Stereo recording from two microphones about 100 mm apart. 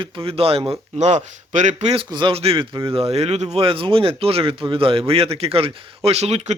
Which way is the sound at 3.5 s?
65° right (ahead or behind).